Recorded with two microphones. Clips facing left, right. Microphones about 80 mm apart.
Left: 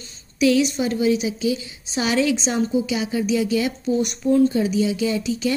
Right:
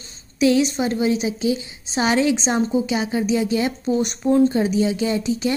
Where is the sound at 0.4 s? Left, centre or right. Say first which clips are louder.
Right 1 dB; right.